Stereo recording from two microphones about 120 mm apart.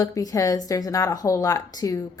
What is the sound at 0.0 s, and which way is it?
A woman's voice, 30° left (ahead or behind).